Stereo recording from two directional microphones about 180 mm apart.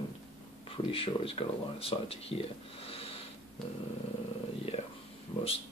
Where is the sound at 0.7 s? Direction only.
30° left (ahead or behind).